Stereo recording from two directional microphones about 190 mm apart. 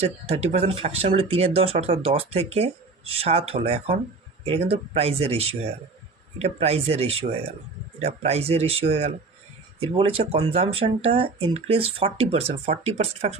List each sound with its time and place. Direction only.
0.0 s speech: 35° right (ahead or behind)